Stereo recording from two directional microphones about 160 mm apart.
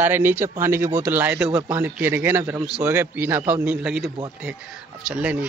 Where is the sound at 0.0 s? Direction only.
15° right (ahead or behind).